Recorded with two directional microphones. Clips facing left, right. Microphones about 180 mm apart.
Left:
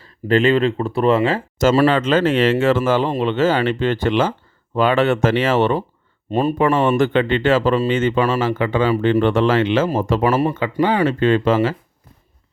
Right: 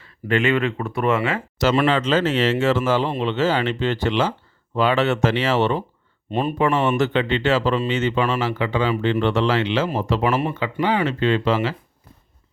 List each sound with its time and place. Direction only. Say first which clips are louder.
0.0 s speech: left 5 dB; 35° left (ahead or behind)
1.5 s speech: left 4 dB; 40° left (ahead or behind)
1.9 s speech: left 3 dB; 55° left (ahead or behind)